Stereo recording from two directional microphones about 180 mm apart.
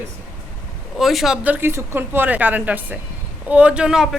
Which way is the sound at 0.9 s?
Centre (ahead or behind).